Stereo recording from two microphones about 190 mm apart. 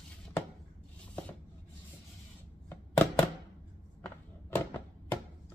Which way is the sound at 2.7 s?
10° left (ahead or behind).